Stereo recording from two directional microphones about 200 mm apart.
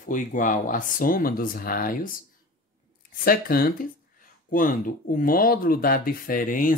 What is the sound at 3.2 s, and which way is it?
Speech, 50° left (ahead or behind).